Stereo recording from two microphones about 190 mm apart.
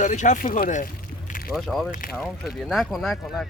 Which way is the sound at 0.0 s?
40° left (ahead or behind).